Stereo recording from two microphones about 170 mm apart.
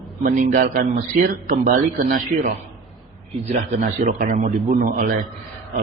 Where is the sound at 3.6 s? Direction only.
45° right (ahead or behind).